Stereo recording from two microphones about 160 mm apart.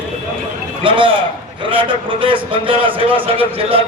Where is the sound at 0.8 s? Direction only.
30° right (ahead or behind).